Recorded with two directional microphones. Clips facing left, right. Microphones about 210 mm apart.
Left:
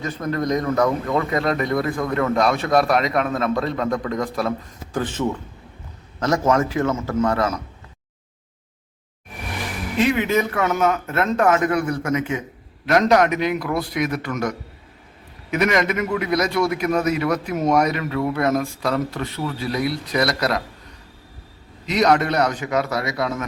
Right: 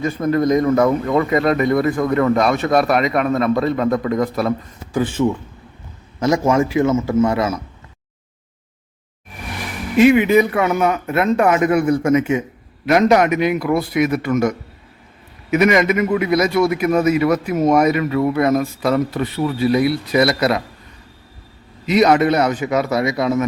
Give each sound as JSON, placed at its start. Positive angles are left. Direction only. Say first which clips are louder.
{"t": 0.0, "sound": "a man's voice", "louder": "right 7 dB", "side_deg": -10}
{"t": 10.0, "sound": "a man's voice", "louder": "right 8 dB", "side_deg": -15}
{"t": 12.8, "sound": "a man's voice", "louder": "right 3 dB", "side_deg": -10}
{"t": 21.8, "sound": "a man's voice", "louder": "right 5 dB", "side_deg": -5}